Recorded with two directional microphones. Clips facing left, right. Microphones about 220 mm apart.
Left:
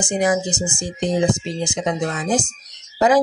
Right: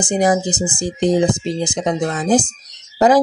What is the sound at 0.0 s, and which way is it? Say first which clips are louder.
Speech: right 3 dB; 35° right (ahead or behind).